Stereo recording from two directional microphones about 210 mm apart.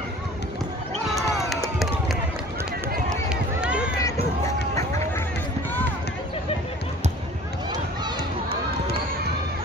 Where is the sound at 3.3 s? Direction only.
5° right (ahead or behind).